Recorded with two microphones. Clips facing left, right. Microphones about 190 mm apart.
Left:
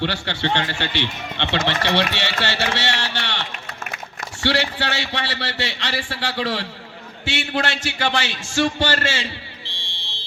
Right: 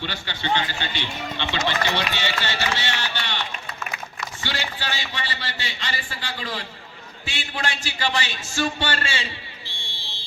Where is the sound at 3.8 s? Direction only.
50° left (ahead or behind).